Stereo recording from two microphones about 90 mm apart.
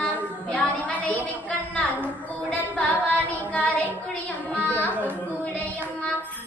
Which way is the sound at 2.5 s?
15° left (ahead or behind).